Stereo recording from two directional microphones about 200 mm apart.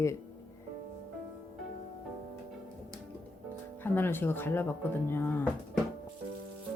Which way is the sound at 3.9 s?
10° left (ahead or behind).